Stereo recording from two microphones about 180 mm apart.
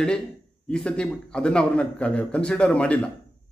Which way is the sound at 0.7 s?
5° left (ahead or behind).